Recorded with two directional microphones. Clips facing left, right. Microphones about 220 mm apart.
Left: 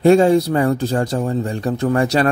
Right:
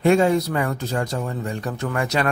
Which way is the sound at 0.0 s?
35° left (ahead or behind).